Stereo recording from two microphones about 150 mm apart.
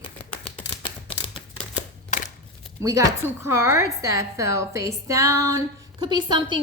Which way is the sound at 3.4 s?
15° right (ahead or behind).